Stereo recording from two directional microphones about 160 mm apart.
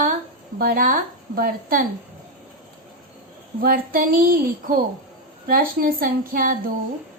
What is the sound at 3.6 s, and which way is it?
A woman's voice, 65° right (ahead or behind).